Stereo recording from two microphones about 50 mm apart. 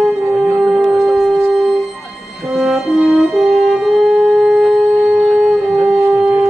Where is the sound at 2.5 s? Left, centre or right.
Centre.